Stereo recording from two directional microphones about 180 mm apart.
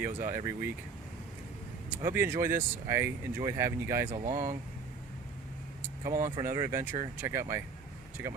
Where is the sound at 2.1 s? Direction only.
15° right (ahead or behind).